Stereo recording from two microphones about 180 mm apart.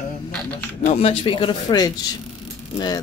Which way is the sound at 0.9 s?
30° left (ahead or behind).